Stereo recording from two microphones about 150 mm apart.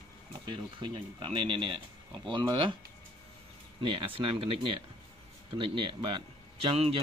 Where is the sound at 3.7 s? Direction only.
35° right (ahead or behind).